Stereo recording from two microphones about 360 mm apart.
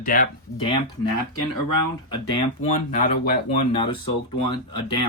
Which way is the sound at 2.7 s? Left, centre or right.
Left.